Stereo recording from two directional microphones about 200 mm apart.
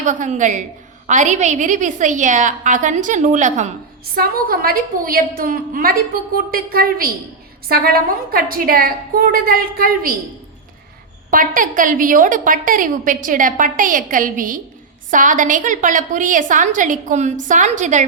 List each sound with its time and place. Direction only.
0.0 s a woman's voice: 40° right (ahead or behind)
4.1 s a woman's voice: 50° right (ahead or behind)
11.3 s a woman's voice: 40° right (ahead or behind)